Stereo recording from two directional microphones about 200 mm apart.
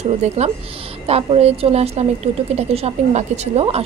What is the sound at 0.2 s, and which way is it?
A woman's voice, 35° right (ahead or behind).